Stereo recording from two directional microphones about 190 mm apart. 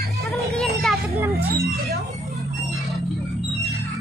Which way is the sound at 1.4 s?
55° right (ahead or behind).